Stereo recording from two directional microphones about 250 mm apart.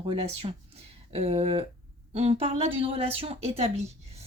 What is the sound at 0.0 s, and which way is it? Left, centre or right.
A woman's voice, right.